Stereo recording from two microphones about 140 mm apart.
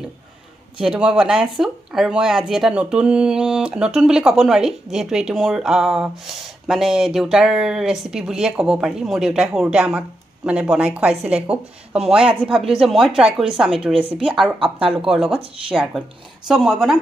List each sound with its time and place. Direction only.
0.7 s speech: 5° right (ahead or behind)
13.9 s speech: 40° right (ahead or behind)
14.2 s speech: centre (ahead or behind)